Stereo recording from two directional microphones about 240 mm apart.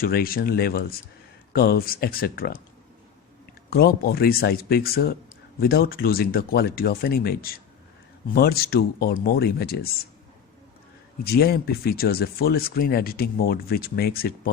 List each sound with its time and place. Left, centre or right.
0.0 s speech: left
3.7 s speech: left
11.2 s speech: left